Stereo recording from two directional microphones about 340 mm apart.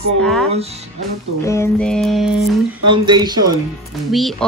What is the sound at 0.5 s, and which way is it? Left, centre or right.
Speech, centre.